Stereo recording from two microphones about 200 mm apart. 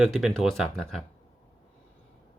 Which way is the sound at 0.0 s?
Centre (ahead or behind).